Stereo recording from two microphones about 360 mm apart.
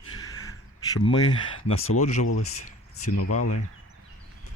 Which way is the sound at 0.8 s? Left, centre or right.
Centre.